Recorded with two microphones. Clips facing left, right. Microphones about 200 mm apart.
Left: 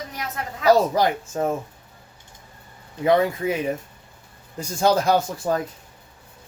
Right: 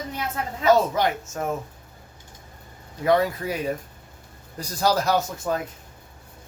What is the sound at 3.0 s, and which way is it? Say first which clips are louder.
Speech: left 2 dB; 25° left (ahead or behind).